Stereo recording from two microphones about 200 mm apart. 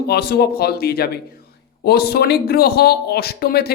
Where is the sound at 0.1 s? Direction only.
55° left (ahead or behind).